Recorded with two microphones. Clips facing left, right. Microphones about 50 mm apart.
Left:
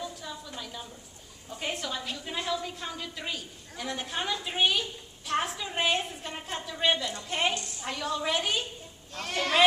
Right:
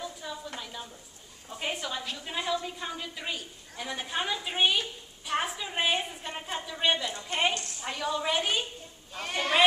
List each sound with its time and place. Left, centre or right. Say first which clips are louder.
0.6 s a sound: even; centre
1.5 s a woman's voice: even; centre
7.0 s a woman's voice: even; right
7.2 s a woman's voice: right 1 dB; centre